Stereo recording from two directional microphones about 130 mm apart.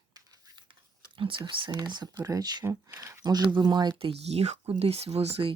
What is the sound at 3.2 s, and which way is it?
Speech, 30° right (ahead or behind).